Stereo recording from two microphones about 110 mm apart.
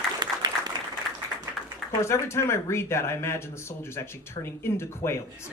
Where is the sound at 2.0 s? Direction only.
25° left (ahead or behind).